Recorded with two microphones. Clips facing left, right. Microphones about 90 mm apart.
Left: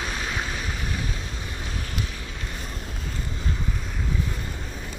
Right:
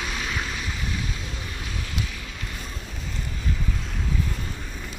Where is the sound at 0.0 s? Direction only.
30° left (ahead or behind).